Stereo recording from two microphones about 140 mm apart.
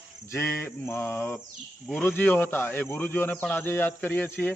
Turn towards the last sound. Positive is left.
turn(degrees=15)  # may be behind; listen again after turning